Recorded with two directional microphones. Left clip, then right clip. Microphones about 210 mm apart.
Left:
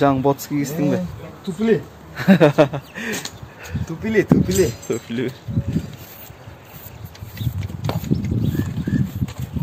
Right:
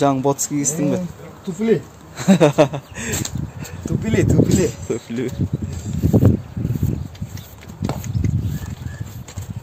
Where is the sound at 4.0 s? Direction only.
55° right (ahead or behind).